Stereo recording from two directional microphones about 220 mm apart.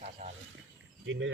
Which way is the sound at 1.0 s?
55° right (ahead or behind).